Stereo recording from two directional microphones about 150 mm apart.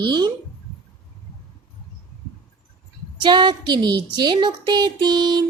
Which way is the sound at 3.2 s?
30° right (ahead or behind).